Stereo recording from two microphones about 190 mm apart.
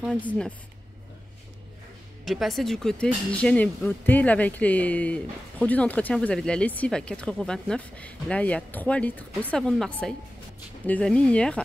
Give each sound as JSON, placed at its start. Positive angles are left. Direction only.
{"t": 0.0, "sound": "speech", "side_deg": 5}
{"t": 2.2, "sound": "speech", "side_deg": 0}